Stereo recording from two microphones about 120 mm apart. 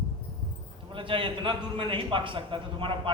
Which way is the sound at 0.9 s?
45° right (ahead or behind).